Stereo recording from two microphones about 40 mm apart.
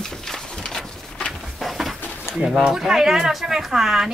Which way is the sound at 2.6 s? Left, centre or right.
Centre.